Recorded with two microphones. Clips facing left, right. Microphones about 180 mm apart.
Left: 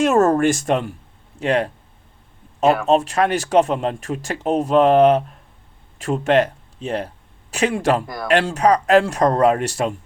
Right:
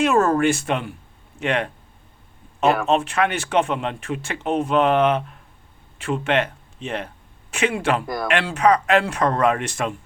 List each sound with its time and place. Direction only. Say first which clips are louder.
0.0 s speech: left 2 dB; 40° left (ahead or behind)